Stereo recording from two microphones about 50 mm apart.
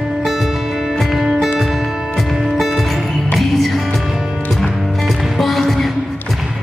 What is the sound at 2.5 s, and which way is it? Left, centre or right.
Music, centre.